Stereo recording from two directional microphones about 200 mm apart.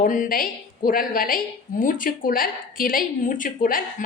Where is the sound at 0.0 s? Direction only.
45° left (ahead or behind).